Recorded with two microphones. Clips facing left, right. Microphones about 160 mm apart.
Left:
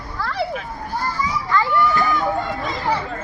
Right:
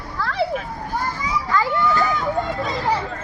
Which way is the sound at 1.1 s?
10° right (ahead or behind).